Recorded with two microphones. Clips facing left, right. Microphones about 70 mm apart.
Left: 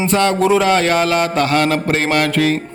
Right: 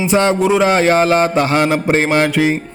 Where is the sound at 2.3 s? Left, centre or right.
Centre.